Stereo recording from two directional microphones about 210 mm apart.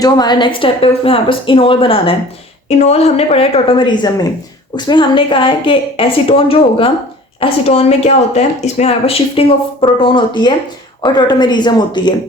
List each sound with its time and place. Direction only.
0.0 s speech: 20° left (ahead or behind)